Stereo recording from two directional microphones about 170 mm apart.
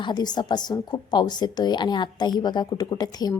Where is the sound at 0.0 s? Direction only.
25° left (ahead or behind).